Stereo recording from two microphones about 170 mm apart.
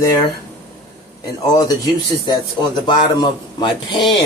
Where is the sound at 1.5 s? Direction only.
20° left (ahead or behind).